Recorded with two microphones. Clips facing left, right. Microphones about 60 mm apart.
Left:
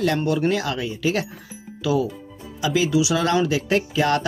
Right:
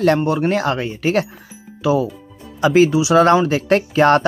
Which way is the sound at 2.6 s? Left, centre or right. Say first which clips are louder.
Right 7 dB; right.